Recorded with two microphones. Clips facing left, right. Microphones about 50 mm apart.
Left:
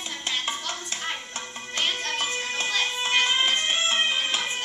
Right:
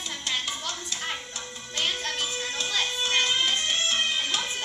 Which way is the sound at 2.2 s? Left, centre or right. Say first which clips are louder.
Left 3 dB; left.